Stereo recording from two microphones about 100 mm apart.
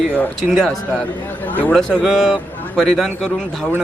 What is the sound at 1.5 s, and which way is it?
Speech, 15° left (ahead or behind).